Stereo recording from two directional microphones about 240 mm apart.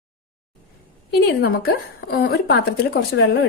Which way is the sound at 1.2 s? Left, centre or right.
Left.